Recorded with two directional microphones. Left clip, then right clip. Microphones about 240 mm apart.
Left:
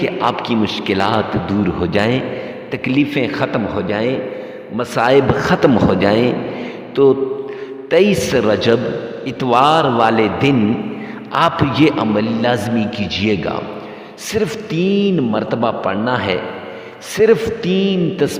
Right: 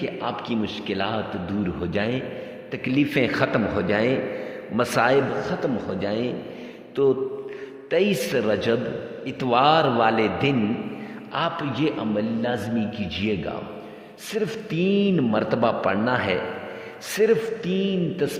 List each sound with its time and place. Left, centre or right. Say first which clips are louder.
0.0 s a man's voice: left 11 dB; left
5.5 s a man's voice: left 13 dB; left